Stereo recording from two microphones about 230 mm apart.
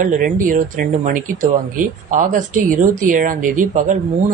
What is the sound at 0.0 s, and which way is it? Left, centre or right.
Speech, right.